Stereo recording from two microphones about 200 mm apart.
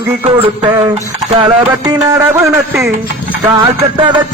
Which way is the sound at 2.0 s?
15° right (ahead or behind).